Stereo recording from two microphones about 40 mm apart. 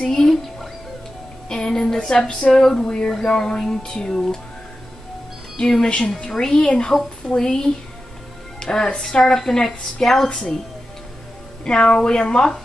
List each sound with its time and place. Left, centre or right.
0.0 s music: centre
1.5 s a sound: centre
2.5 s speech: centre
5.6 s speech: centre
11.6 s a woman's voice: left